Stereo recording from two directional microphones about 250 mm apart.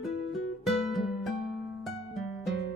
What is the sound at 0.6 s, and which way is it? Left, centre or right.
Music, centre.